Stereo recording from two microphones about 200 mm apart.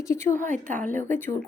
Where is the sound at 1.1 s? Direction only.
10° left (ahead or behind).